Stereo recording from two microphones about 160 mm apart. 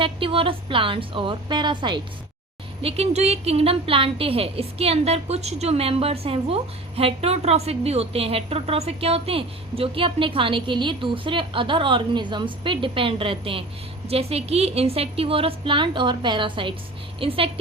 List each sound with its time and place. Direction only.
0.0 s a woman's voice: 35° right (ahead or behind)
2.8 s a woman's voice: 40° right (ahead or behind)